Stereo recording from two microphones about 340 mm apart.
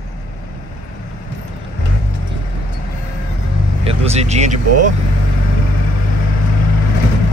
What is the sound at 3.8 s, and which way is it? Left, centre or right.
Speech, centre.